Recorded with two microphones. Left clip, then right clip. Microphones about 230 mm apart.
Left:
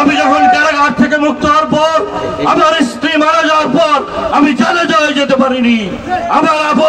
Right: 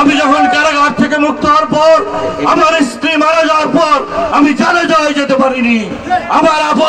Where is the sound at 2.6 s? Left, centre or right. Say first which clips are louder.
Even; right.